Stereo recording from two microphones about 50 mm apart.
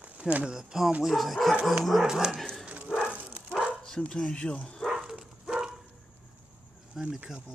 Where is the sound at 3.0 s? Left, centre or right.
Right.